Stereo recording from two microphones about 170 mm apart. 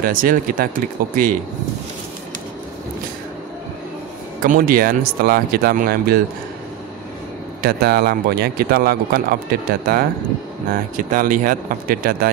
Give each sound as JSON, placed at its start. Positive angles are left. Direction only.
{"t": 0.0, "sound": "speech", "side_deg": -55}
{"t": 4.4, "sound": "speech", "side_deg": -55}
{"t": 7.6, "sound": "speech", "side_deg": -65}
{"t": 10.7, "sound": "speech", "side_deg": -55}